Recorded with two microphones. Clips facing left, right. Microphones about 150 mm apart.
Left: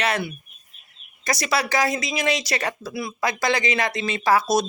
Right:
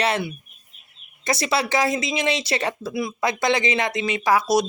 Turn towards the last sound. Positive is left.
turn(degrees=-15)  # may be behind; listen again after turning